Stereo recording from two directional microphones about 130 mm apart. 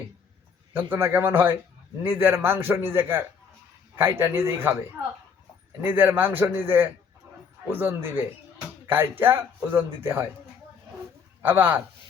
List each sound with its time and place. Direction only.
0.7 s speech: 20° right (ahead or behind)
5.8 s speech: 15° right (ahead or behind)
11.4 s speech: 15° right (ahead or behind)